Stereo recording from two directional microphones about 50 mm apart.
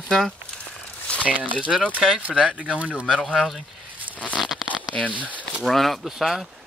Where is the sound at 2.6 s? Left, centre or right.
Right.